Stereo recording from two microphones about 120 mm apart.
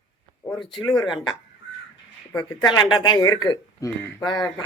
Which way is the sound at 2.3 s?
35° left (ahead or behind).